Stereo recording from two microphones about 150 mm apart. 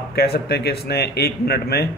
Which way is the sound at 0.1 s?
90° left.